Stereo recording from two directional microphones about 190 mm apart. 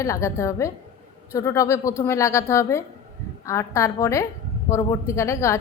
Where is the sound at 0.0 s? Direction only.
15° left (ahead or behind).